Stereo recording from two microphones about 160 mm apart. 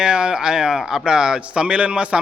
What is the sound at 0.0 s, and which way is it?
Speech, 5° right (ahead or behind).